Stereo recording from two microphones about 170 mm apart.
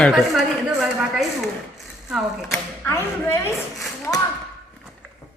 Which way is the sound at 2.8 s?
15° left (ahead or behind).